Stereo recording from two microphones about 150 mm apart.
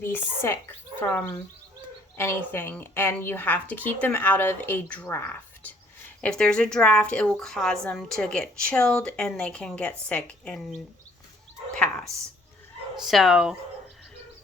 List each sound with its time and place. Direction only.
0.0 s a woman's voice: 15° left (ahead or behind)
11.7 s a woman's voice: 5° left (ahead or behind)